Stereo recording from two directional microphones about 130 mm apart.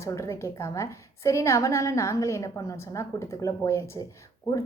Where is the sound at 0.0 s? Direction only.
20° left (ahead or behind).